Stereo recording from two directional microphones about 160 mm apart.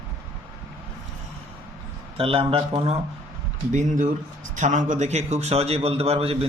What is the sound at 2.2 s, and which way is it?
Speech, 35° right (ahead or behind).